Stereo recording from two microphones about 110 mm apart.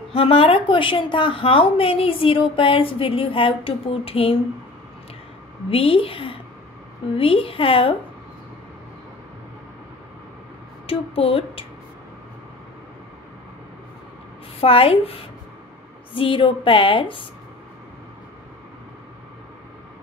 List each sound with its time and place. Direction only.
0.1 s a woman's voice: 60° left (ahead or behind)
5.7 s a woman's voice: 55° left (ahead or behind)
10.9 s a sound: 60° left (ahead or behind)
14.6 s a woman's voice: 60° left (ahead or behind)